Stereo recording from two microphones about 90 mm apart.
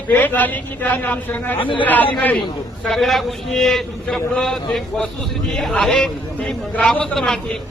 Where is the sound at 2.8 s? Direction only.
5° left (ahead or behind).